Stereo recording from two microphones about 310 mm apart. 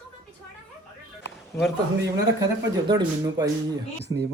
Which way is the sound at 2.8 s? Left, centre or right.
Centre.